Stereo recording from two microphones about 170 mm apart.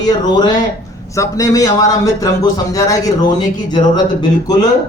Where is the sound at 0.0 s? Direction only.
25° left (ahead or behind).